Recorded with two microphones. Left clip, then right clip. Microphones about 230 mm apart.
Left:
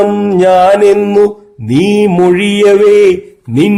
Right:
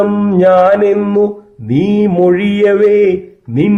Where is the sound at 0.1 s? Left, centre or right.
Left.